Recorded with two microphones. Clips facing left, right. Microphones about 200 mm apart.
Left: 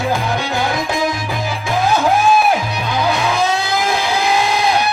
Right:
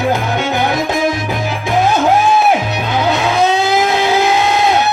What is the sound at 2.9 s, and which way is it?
Guitar, 20° right (ahead or behind).